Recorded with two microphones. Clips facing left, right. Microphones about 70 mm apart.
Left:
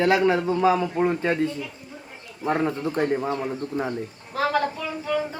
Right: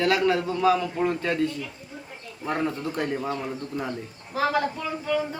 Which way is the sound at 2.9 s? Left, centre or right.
Left.